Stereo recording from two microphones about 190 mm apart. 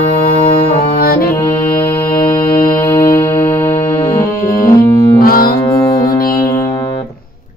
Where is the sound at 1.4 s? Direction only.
25° left (ahead or behind).